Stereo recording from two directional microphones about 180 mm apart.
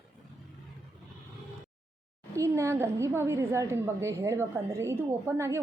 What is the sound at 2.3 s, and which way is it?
A woman's voice, 15° right (ahead or behind).